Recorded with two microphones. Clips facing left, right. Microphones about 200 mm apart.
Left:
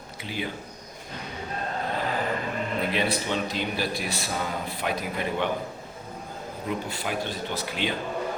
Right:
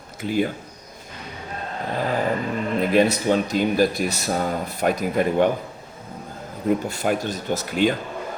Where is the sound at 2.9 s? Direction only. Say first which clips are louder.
Right 12 dB; 45° right (ahead or behind).